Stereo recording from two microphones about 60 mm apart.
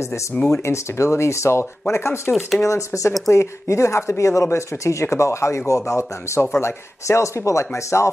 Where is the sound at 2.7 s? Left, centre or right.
Left.